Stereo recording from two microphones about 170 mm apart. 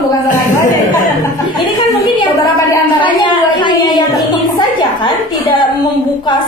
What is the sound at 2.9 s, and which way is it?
A woman's voice, 25° left (ahead or behind).